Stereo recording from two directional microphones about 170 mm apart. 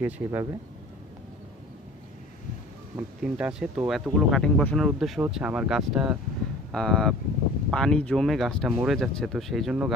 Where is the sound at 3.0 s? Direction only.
5° right (ahead or behind).